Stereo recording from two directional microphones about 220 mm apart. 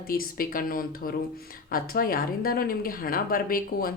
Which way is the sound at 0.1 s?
40° left (ahead or behind).